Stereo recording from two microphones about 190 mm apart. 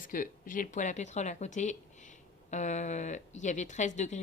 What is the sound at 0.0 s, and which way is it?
Speech, 45° left (ahead or behind).